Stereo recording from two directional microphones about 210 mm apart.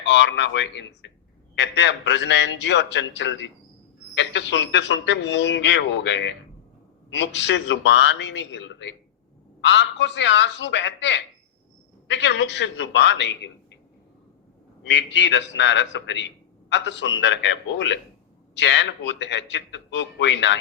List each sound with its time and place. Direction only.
0.0 s a man's voice: 55° left (ahead or behind)
14.8 s a man's voice: 60° left (ahead or behind)